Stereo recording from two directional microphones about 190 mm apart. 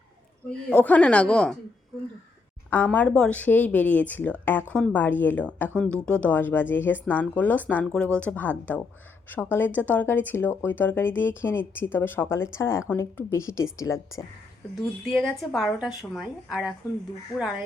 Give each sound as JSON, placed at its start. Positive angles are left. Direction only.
{"t": 0.7, "sound": "speech", "side_deg": 10}
{"t": 2.6, "sound": "speech", "side_deg": 10}
{"t": 15.1, "sound": "speech", "side_deg": 0}